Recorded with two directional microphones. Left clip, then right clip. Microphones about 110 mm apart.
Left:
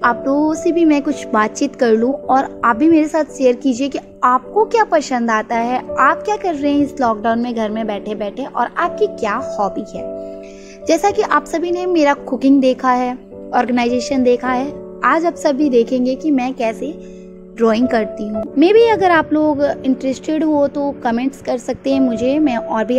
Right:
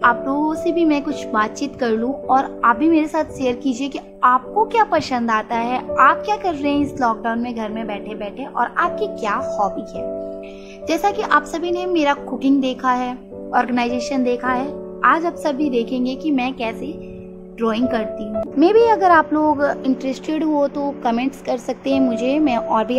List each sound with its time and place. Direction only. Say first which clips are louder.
0.0 s a sound: left 1 dB; 35° left (ahead or behind)
0.7 s a woman's voice: left 4 dB; 45° left (ahead or behind)
8.5 s a woman's voice: left 2 dB; 35° left (ahead or behind)
19.4 s a woman's voice: left 2 dB; 30° left (ahead or behind)